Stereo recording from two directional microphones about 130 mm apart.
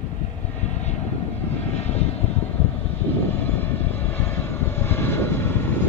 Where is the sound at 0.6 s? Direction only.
60° left (ahead or behind).